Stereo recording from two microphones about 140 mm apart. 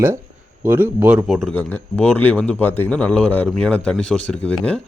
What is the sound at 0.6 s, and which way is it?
Speech, 15° right (ahead or behind).